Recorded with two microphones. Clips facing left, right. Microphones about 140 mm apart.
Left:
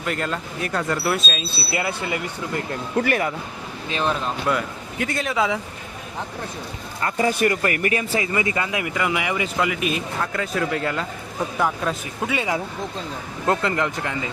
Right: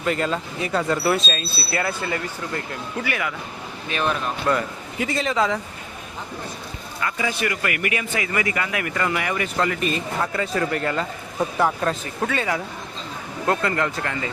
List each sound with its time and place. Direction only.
0.0 s speech: centre (ahead or behind)
1.5 s speech: 15° left (ahead or behind)
2.9 s speech: 45° left (ahead or behind)
3.8 s a man's voice: 25° left (ahead or behind)
4.4 s speech: centre (ahead or behind)
7.0 s a man's voice: 45° left (ahead or behind); by 12.3 s centre (ahead or behind)
12.3 s a man's voice: 15° left (ahead or behind)